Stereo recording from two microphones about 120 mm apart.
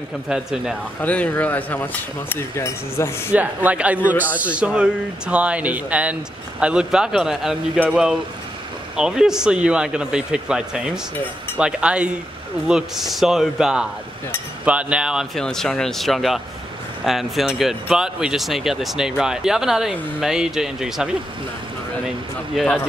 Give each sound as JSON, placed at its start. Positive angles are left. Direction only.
{"t": 0.3, "sound": "speech", "side_deg": -5}
{"t": 1.0, "sound": "speech", "side_deg": 10}
{"t": 3.3, "sound": "a man's voice", "side_deg": -10}
{"t": 15.3, "sound": "speech", "side_deg": 5}
{"t": 22.6, "sound": "speech", "side_deg": -5}